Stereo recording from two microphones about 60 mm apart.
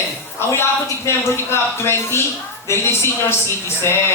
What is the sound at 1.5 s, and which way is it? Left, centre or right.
A woman's voice, left.